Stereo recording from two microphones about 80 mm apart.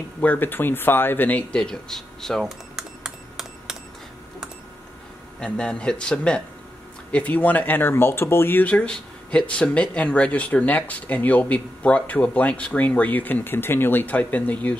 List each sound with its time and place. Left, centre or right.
0.2 s speech: left; by 2.4 s centre
2.4 s cash register: centre
5.4 s speech: centre